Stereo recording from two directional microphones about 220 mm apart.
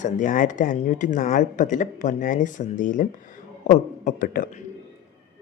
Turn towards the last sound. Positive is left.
turn(degrees=40)  # may be behind; listen again after turning